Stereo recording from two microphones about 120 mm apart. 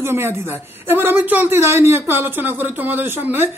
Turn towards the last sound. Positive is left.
turn(degrees=-15)  # may be behind; listen again after turning